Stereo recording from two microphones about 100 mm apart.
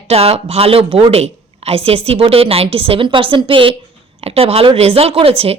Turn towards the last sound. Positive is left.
turn(degrees=-75)  # may be behind; listen again after turning